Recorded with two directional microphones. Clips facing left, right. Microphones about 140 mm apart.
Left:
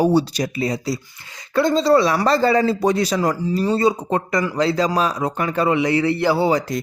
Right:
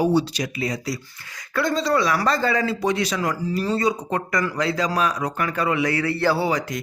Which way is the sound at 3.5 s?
25° left (ahead or behind).